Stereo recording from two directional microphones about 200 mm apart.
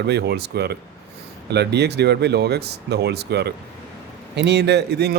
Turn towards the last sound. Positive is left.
turn(degrees=-55)  # may be behind; listen again after turning